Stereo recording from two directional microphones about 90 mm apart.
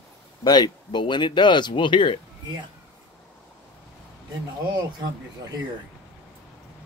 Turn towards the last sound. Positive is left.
turn(degrees=-45)  # may be behind; listen again after turning